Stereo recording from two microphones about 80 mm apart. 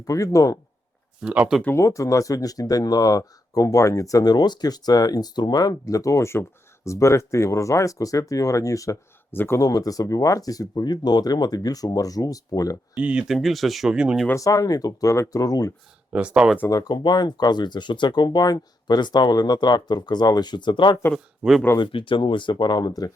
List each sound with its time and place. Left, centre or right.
0.0 s speech: left
1.2 s speech: centre
1.7 s speech: left
9.3 s speech: left
9.6 s speech: left
13.0 s speech: centre
13.2 s speech: centre
13.9 s speech: centre
14.3 s speech: left
16.1 s speech: centre
16.6 s speech: left
21.4 s speech: centre
21.8 s speech: left